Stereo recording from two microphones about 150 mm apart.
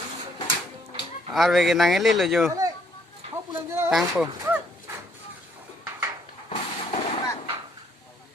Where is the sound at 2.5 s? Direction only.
25° right (ahead or behind).